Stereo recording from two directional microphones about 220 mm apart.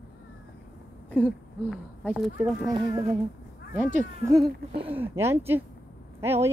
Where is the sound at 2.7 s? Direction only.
20° right (ahead or behind).